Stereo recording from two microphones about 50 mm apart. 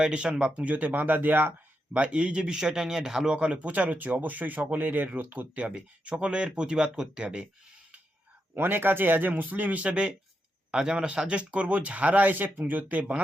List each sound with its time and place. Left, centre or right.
0.0 s a man's voice: centre
0.5 s speech: right
1.9 s a man's voice: right
3.3 s speech: right
5.7 s a man's voice: right
8.5 s a man's voice: right